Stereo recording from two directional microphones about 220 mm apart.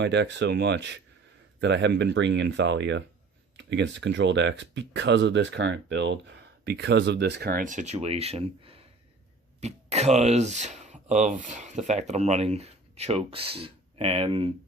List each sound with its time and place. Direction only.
0.0 s speech: 50° right (ahead or behind); by 14.5 s 25° right (ahead or behind)